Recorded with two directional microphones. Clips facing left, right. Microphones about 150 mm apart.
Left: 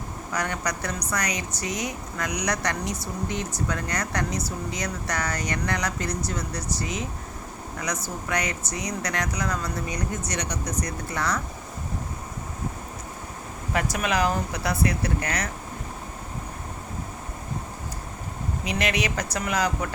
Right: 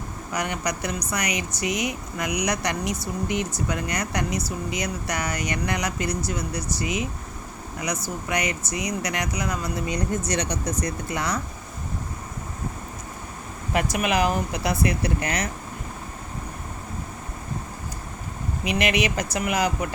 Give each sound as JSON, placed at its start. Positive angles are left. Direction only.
{"t": 0.3, "sound": "speech", "side_deg": -15}
{"t": 9.9, "sound": "speech", "side_deg": -30}
{"t": 11.1, "sound": "speech", "side_deg": -15}
{"t": 13.9, "sound": "speech", "side_deg": -15}
{"t": 18.7, "sound": "speech", "side_deg": -15}